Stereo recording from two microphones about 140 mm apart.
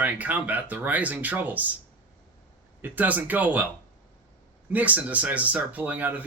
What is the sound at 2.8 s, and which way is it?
Speech, 10° right (ahead or behind).